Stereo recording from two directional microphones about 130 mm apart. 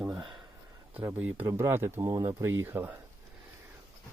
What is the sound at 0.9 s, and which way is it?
Speech, 15° right (ahead or behind).